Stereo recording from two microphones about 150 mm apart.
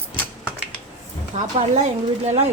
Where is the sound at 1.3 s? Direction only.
50° right (ahead or behind).